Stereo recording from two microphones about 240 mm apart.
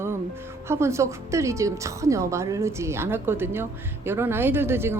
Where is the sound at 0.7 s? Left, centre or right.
Centre.